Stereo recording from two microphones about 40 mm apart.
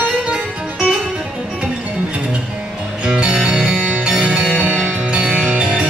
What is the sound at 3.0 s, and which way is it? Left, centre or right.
Music, right.